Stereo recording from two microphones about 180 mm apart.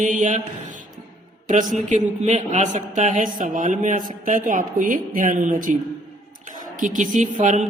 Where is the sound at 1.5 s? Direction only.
45° right (ahead or behind).